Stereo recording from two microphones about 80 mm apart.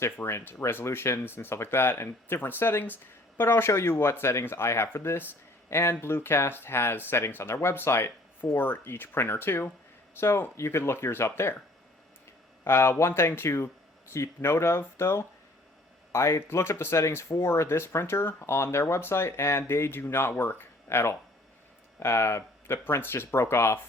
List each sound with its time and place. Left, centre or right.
0.0 s speech: left
12.6 s speech: left